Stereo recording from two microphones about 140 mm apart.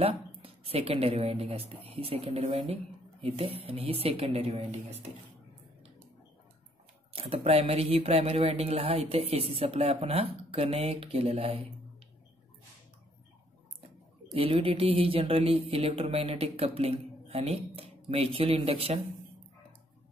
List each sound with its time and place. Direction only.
0.0 s speech: 45° right (ahead or behind)
7.2 s speech: 45° right (ahead or behind)
14.3 s speech: 40° right (ahead or behind)